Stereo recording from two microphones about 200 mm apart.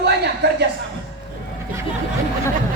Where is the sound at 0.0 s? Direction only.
55° right (ahead or behind).